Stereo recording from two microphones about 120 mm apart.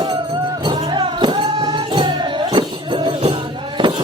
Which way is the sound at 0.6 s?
40° right (ahead or behind).